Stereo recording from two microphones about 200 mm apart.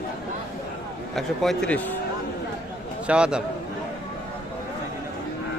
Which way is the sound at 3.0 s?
5° right (ahead or behind).